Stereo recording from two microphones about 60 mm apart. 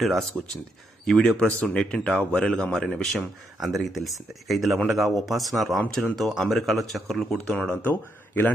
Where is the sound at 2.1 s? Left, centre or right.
Left.